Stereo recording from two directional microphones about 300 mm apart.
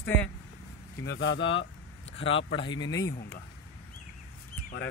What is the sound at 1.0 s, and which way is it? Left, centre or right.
Speech, left.